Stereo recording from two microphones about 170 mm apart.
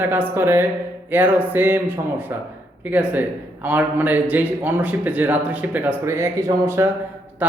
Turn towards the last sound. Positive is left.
turn(degrees=-10)  # may be behind; listen again after turning